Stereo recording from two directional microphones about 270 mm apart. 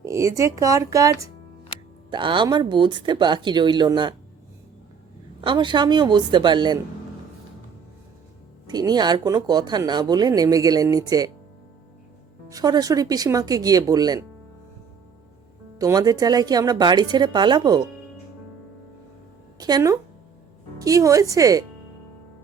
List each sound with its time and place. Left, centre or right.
0.0 s speech: centre
5.4 s speech: centre
8.6 s speech: centre
12.5 s speech: centre
15.8 s speech: centre
19.5 s speech: centre